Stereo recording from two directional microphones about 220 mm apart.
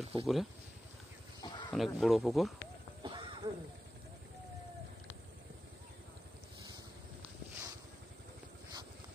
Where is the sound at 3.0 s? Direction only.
25° right (ahead or behind).